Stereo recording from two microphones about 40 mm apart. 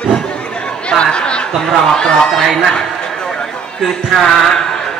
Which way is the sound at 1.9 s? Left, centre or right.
Centre.